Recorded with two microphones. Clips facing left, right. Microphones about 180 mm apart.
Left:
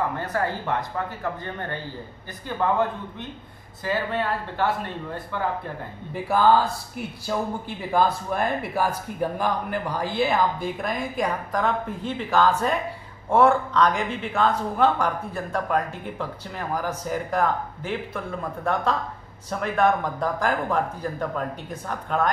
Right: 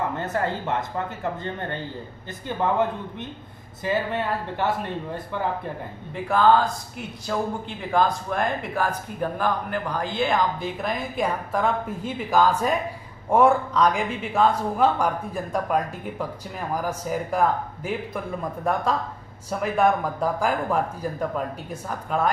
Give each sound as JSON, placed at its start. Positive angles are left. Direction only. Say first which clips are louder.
{"t": 0.1, "sound": "a man's voice", "louder": "right 1 dB", "side_deg": -25}
{"t": 2.4, "sound": "a man's voice", "louder": "even", "side_deg": -20}
{"t": 6.2, "sound": "speech", "louder": "right 1 dB", "side_deg": 5}